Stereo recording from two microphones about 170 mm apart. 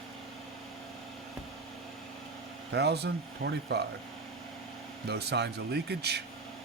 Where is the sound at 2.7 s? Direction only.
75° right (ahead or behind).